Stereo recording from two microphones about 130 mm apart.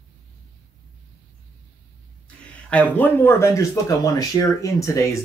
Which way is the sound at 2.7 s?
10° left (ahead or behind).